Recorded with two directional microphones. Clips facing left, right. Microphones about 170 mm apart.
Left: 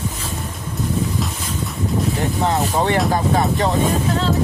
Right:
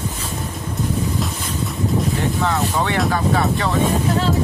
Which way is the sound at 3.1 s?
35° left (ahead or behind).